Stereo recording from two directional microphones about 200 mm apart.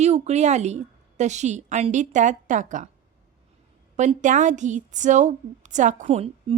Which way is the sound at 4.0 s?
40° right (ahead or behind).